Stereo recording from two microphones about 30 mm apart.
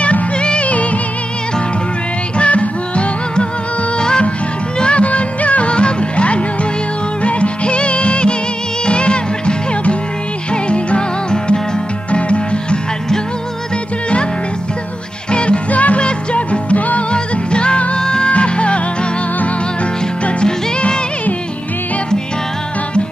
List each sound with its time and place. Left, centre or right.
0.4 s music: left
2.3 s music: left
4.7 s music: left
5.0 s music: left
5.7 s music: left
12.1 s music: left
15.3 s music: left
15.7 s music: left
16.0 s music: left
17.1 s music: left
17.9 s music: left
18.3 s music: left